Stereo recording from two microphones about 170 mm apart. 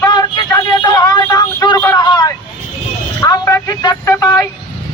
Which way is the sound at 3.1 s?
20° left (ahead or behind).